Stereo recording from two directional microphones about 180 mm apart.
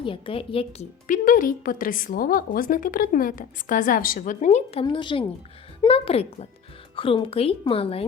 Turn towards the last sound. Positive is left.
turn(degrees=30)  # may be behind; listen again after turning